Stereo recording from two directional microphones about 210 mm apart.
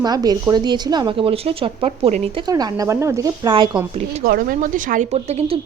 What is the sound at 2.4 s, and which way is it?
Speech, 15° right (ahead or behind).